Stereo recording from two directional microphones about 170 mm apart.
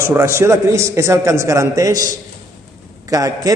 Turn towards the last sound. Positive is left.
turn(degrees=-20)  # may be behind; listen again after turning